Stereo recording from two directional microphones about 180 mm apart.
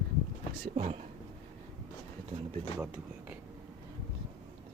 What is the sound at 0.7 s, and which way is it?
Speech, 35° right (ahead or behind).